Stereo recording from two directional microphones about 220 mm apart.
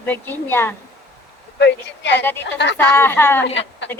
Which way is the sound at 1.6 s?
50° left (ahead or behind).